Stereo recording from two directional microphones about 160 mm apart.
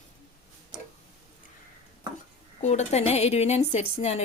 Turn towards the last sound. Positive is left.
turn(degrees=40)  # may be behind; listen again after turning